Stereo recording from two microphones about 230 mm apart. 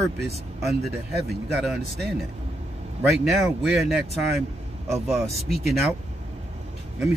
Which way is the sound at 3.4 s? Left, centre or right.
Centre.